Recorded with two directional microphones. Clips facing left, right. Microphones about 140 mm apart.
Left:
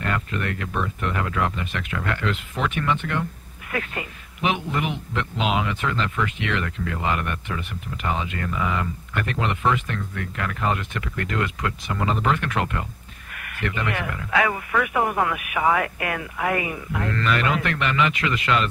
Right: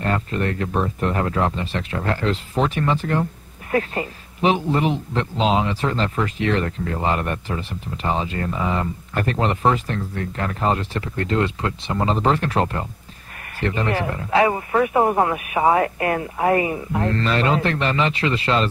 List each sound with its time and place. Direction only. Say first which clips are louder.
0.0 s a man's voice: right 4 dB; 35° right (ahead or behind)